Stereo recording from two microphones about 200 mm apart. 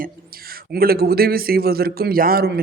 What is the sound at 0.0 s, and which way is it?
Speech, 50° right (ahead or behind).